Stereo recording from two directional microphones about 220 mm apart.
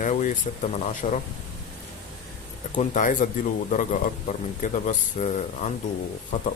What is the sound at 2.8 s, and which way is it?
Speech, 35° left (ahead or behind).